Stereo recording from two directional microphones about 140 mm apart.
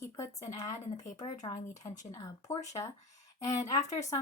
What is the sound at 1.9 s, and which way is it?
Speech, 60° left (ahead or behind).